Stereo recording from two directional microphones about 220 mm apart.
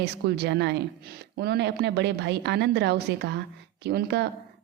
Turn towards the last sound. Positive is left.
turn(degrees=-50)  # may be behind; listen again after turning